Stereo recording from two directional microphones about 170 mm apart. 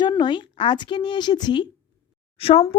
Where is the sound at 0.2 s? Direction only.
30° left (ahead or behind).